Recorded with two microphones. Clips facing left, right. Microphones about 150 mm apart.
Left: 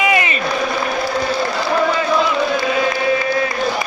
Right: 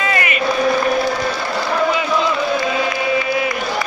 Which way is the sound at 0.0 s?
15° left (ahead or behind).